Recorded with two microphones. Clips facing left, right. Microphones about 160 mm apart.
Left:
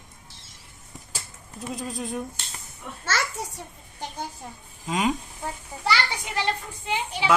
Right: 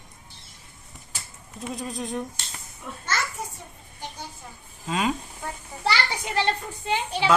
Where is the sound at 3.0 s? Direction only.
90° left.